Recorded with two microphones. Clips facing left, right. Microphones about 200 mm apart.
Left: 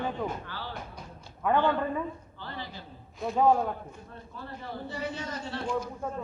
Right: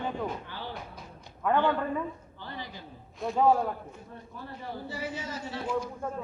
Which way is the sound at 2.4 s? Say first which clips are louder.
Even; 15° right (ahead or behind).